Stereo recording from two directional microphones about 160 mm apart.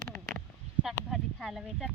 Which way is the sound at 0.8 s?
Centre (ahead or behind).